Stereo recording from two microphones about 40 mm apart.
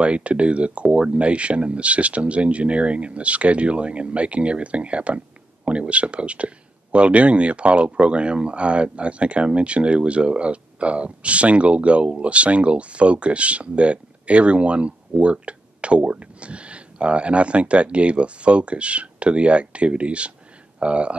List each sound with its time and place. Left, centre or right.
0.0 s speech: right